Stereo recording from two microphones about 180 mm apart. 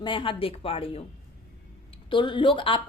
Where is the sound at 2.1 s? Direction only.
25° left (ahead or behind).